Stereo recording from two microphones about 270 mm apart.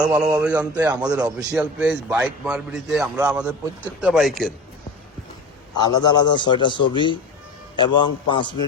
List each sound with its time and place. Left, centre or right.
0.3 s speech: centre
1.4 s a man's voice: centre
5.7 s a man's voice: centre